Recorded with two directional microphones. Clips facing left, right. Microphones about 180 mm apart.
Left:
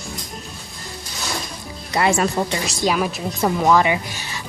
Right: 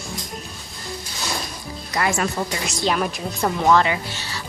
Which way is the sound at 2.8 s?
5° left (ahead or behind).